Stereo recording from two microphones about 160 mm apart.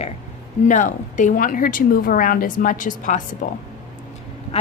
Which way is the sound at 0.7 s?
50° left (ahead or behind).